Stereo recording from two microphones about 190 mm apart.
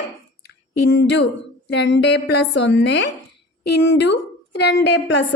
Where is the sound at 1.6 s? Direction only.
65° left (ahead or behind).